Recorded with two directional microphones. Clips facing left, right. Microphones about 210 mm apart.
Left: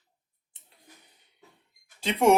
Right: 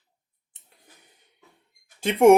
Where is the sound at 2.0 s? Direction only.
50° right (ahead or behind).